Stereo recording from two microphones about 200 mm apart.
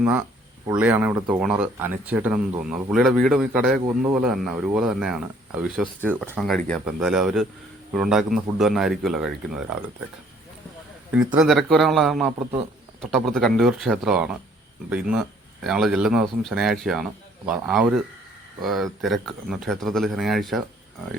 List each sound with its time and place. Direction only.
0.0 s a man's voice: 10° right (ahead or behind)
6.3 s a man's voice: centre (ahead or behind)
11.3 s a man's voice: centre (ahead or behind)